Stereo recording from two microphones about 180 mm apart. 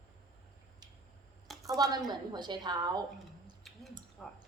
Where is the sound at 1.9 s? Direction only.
25° right (ahead or behind).